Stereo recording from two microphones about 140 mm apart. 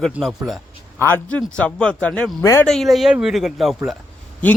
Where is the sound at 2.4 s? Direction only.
20° left (ahead or behind).